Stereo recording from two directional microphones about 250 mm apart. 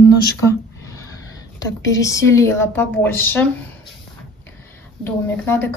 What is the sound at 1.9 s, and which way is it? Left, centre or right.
Speech, centre.